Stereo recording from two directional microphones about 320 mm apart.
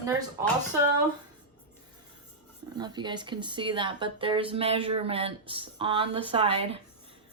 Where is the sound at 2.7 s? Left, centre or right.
Centre.